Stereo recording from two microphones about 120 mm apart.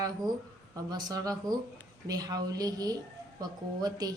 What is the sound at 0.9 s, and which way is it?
A woman's voice, 35° right (ahead or behind).